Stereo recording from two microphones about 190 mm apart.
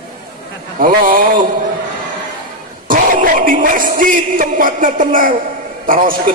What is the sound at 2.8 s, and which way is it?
A man's voice, 45° right (ahead or behind).